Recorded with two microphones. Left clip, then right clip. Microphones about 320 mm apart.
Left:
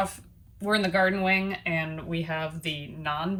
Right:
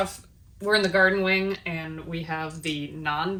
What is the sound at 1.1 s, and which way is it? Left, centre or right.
Speech, left.